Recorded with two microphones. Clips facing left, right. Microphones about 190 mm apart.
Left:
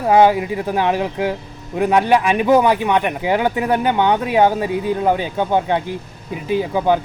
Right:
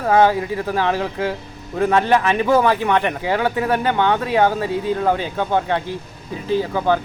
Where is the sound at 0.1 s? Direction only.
15° left (ahead or behind).